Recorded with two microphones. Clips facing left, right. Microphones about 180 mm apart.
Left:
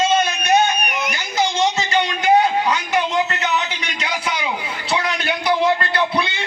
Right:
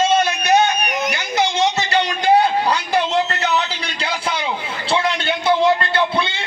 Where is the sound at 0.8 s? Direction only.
40° right (ahead or behind).